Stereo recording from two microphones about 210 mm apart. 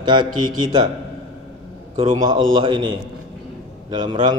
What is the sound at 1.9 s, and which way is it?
Speech, 25° right (ahead or behind).